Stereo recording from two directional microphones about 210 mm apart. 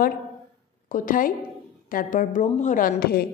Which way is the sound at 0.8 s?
40° left (ahead or behind).